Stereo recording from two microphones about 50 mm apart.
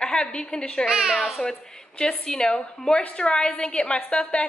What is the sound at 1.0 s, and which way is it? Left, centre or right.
Speech, centre.